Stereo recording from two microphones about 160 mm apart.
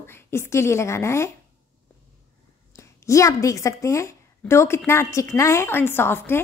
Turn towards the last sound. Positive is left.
turn(degrees=15)  # may be behind; listen again after turning